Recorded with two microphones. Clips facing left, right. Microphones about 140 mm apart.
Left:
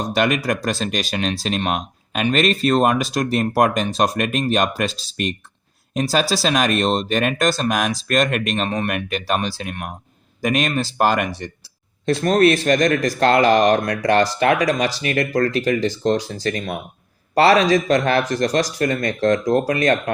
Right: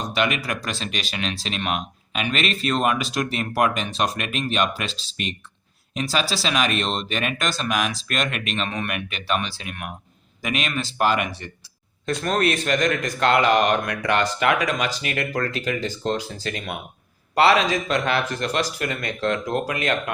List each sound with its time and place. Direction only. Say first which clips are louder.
0.1 s speech: left 5 dB; 40° left (ahead or behind)